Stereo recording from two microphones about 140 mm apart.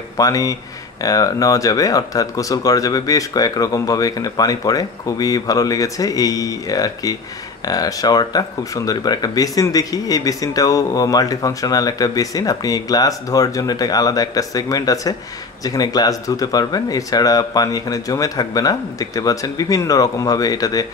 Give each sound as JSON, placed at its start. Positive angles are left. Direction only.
{"t": 0.2, "sound": "speech", "side_deg": 25}